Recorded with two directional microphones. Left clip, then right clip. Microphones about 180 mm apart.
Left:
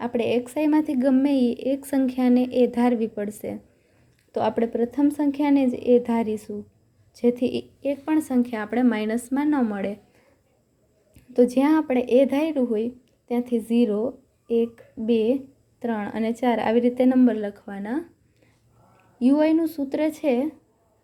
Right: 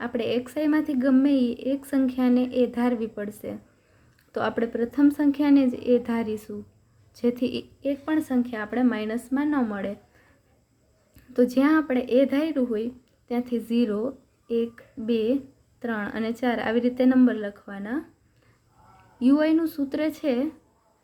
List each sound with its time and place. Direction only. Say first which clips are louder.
0.0 s a woman's voice: left 3 dB; 15° left (ahead or behind)
11.1 s a woman's voice: left 3 dB; 10° left (ahead or behind)
19.2 s a woman's voice: left 2 dB; 10° left (ahead or behind)